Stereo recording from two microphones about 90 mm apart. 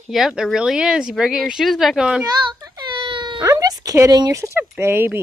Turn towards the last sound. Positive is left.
turn(degrees=-25)  # may be behind; listen again after turning